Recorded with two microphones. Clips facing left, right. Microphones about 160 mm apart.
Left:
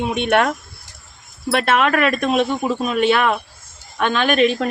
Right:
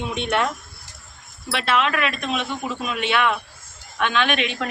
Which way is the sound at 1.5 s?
50° left (ahead or behind).